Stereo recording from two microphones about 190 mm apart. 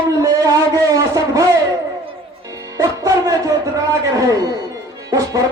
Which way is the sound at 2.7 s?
20° right (ahead or behind).